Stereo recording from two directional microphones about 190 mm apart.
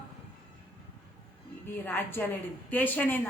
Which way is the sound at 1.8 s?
10° left (ahead or behind).